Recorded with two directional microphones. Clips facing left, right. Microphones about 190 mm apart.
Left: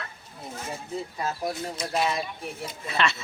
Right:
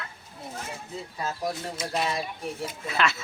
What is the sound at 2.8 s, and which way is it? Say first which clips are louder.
Speech: even; centre (ahead or behind).